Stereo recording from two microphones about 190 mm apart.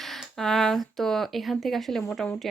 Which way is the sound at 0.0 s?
Centre (ahead or behind).